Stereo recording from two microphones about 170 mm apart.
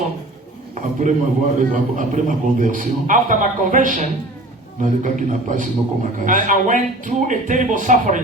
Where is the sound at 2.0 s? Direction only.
50° right (ahead or behind).